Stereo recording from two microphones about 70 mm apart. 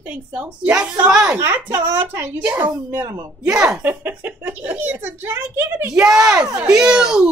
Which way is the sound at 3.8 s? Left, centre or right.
Right.